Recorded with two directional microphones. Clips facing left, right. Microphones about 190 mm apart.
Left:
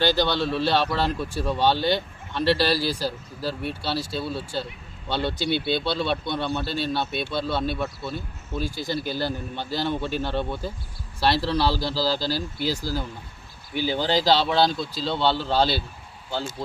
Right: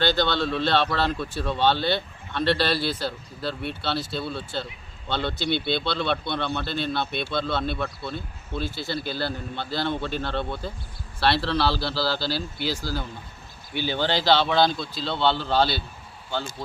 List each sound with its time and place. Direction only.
0.0 s speech: 10° left (ahead or behind)
12.3 s speech: 40° left (ahead or behind)
14.0 s speech: 40° left (ahead or behind)